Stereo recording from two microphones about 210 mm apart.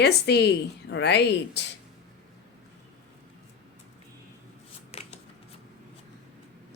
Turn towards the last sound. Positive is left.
turn(degrees=30)  # may be behind; listen again after turning